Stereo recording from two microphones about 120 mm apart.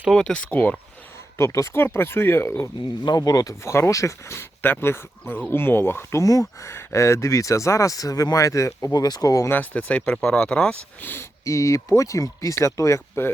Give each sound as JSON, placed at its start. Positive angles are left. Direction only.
{"t": 0.1, "sound": "speech", "side_deg": 5}
{"t": 1.4, "sound": "speech", "side_deg": 25}
{"t": 3.0, "sound": "speech", "side_deg": 35}